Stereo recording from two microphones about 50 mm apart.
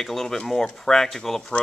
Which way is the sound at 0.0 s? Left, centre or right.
Centre.